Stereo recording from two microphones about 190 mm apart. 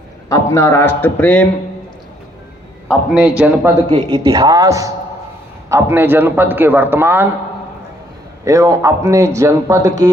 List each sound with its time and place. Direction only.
0.3 s a man's voice: 15° left (ahead or behind)
3.2 s a man's voice: 5° right (ahead or behind)
3.8 s a man's voice: 25° right (ahead or behind); by 7.3 s 10° right (ahead or behind)
8.4 s a man's voice: 15° right (ahead or behind)